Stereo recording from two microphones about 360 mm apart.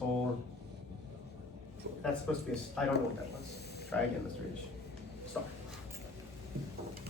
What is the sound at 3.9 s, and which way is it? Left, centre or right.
Speech, centre.